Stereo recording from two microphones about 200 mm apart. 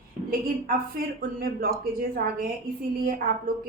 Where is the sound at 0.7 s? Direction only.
45° right (ahead or behind).